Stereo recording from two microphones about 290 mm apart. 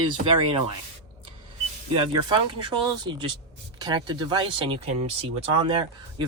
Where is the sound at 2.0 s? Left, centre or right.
Centre.